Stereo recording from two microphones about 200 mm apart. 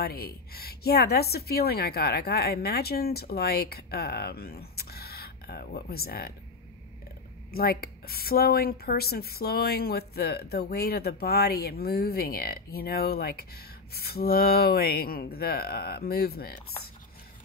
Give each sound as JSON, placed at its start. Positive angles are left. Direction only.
{"t": 0.0, "sound": "speech", "side_deg": 50}
{"t": 7.5, "sound": "speech", "side_deg": 50}